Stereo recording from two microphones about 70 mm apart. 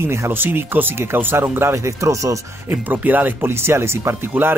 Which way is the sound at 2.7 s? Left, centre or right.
Right.